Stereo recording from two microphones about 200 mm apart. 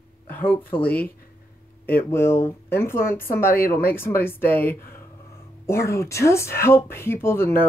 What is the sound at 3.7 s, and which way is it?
Speech, 10° left (ahead or behind).